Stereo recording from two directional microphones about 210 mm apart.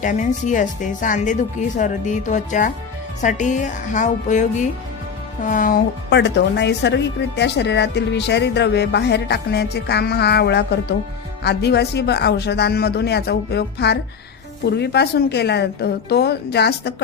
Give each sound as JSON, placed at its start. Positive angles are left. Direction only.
{"t": 0.0, "sound": "speech", "side_deg": 35}